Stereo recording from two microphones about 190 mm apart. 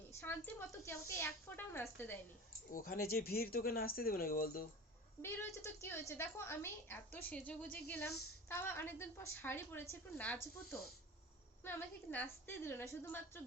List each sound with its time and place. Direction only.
0.1 s a woman's voice: 10° left (ahead or behind)
2.7 s speech: 50° left (ahead or behind)
5.2 s a woman's voice: 15° left (ahead or behind)